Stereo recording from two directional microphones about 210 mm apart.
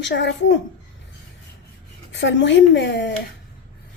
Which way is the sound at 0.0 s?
55° left (ahead or behind).